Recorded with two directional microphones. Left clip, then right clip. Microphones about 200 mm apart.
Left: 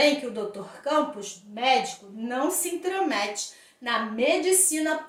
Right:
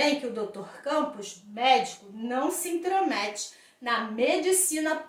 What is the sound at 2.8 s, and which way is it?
A woman's voice, 5° left (ahead or behind).